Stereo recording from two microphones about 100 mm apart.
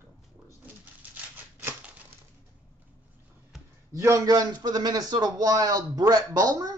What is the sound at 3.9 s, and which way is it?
Speech, 30° right (ahead or behind).